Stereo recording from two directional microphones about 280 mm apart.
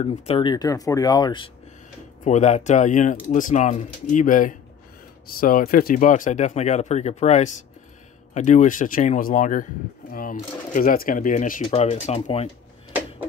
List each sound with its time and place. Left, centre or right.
0.0 s speech: left